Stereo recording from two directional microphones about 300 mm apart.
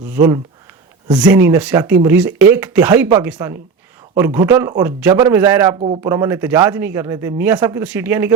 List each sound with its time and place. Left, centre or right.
0.1 s speech: centre